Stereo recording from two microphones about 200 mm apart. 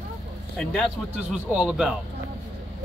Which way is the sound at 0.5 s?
5° left (ahead or behind).